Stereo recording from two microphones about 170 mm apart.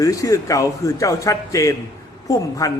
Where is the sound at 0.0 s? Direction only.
20° left (ahead or behind).